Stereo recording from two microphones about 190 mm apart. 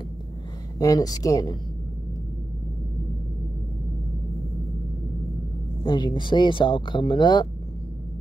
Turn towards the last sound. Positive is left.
turn(degrees=25)  # may be behind; listen again after turning